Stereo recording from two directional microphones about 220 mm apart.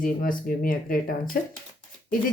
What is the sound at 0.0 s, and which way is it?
Speech, 40° left (ahead or behind).